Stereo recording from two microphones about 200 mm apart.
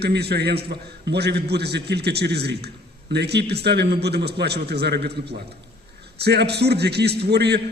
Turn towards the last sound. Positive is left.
turn(degrees=-55)  # may be behind; listen again after turning